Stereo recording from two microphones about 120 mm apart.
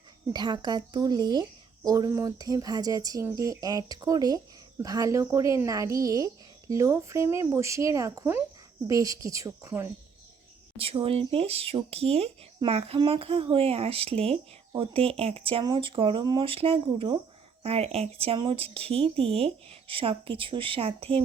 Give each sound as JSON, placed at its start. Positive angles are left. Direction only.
{"t": 0.3, "sound": "speech", "side_deg": -40}
{"t": 10.8, "sound": "speech", "side_deg": -50}
{"t": 16.5, "sound": "speech", "side_deg": -50}